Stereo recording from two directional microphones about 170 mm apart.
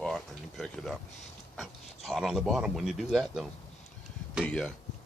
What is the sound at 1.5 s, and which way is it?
Speech, centre (ahead or behind).